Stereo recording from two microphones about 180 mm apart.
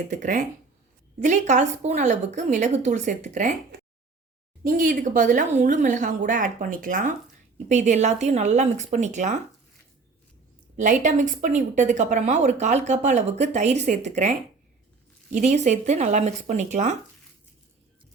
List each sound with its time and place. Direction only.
0.1 s speech: 45° right (ahead or behind)
4.6 s speech: 50° right (ahead or behind)
10.8 s speech: 45° right (ahead or behind)